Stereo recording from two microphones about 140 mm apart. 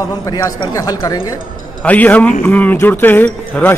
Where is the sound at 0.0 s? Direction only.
25° left (ahead or behind).